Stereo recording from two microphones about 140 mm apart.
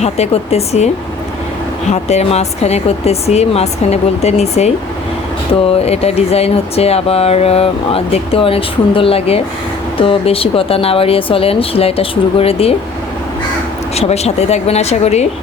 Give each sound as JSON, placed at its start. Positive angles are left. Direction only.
{"t": 0.0, "sound": "speech", "side_deg": 50}
{"t": 1.9, "sound": "speech", "side_deg": 50}
{"t": 13.9, "sound": "speech", "side_deg": 50}